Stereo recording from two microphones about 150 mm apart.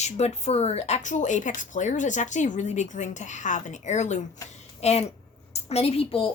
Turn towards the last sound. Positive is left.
turn(degrees=40)  # may be behind; listen again after turning